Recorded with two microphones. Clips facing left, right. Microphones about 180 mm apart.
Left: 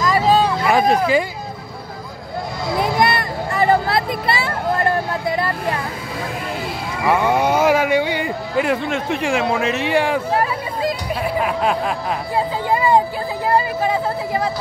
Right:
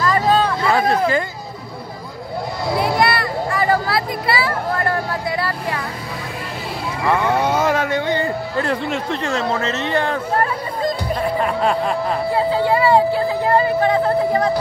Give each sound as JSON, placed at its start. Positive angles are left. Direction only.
{"t": 0.0, "sound": "vehicle", "side_deg": 10}
{"t": 2.8, "sound": "vehicle", "side_deg": 20}
{"t": 7.1, "sound": "speech", "side_deg": 10}
{"t": 12.6, "sound": "speech", "side_deg": 15}